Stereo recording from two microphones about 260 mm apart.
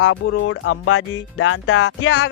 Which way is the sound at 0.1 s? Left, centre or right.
Left.